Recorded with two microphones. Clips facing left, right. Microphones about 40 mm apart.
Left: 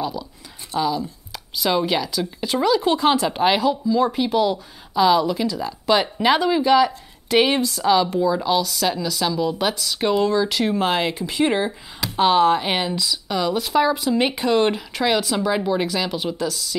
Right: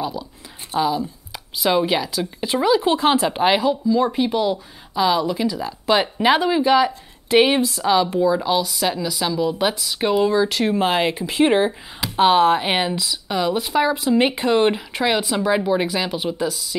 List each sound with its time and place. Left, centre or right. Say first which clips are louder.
0.7 s speech: right 2 dB; centre